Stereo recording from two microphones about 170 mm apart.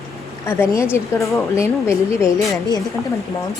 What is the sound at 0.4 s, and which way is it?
A woman's voice, 15° left (ahead or behind).